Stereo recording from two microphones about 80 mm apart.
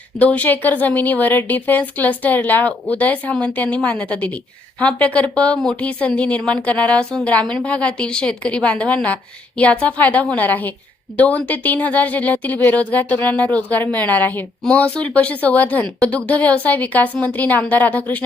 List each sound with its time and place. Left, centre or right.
0.2 s a woman's voice: centre